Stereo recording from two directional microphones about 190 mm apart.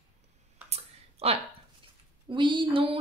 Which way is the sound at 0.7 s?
35° right (ahead or behind).